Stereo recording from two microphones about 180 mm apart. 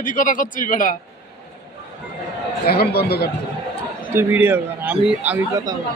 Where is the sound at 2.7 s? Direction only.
60° left (ahead or behind).